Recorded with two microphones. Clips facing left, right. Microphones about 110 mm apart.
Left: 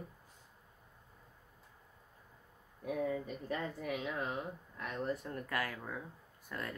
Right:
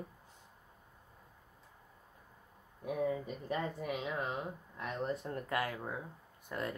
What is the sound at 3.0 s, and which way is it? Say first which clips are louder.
Speech: right 1 dB; 15° right (ahead or behind).